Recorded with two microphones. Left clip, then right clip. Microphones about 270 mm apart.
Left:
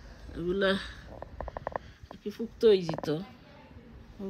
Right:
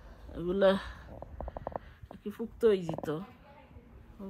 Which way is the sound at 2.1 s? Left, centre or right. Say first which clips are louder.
Left 3 dB; centre.